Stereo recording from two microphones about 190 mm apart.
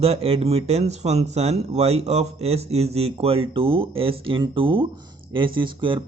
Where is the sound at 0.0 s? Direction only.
30° right (ahead or behind).